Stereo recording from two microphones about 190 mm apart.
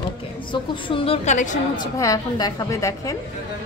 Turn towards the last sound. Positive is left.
turn(degrees=15)  # may be behind; listen again after turning